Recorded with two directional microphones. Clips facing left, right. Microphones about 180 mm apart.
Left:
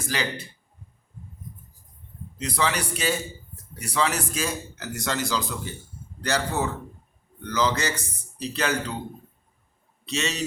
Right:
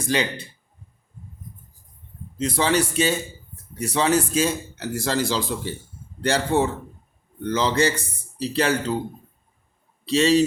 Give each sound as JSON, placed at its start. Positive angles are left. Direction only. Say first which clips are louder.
{"t": 0.1, "sound": "a man's voice", "louder": "right 6 dB", "side_deg": -25}
{"t": 2.4, "sound": "a man's voice", "louder": "right 6 dB", "side_deg": -25}
{"t": 10.1, "sound": "a man's voice", "louder": "right 12 dB", "side_deg": -30}